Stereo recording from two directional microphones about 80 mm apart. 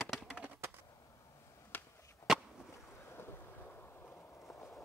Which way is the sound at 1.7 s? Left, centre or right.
Left.